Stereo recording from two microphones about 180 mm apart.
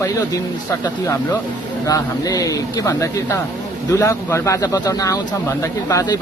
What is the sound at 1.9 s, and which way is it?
Speech, 20° left (ahead or behind).